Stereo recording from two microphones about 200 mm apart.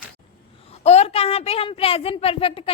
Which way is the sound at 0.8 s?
30° left (ahead or behind).